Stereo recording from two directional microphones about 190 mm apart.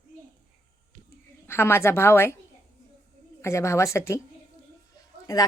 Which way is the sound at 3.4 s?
15° left (ahead or behind).